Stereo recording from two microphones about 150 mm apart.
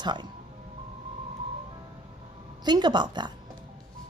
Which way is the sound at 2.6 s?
30° right (ahead or behind).